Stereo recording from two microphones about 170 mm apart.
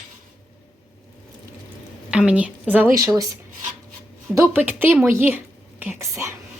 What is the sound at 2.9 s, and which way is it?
Speech, 20° right (ahead or behind).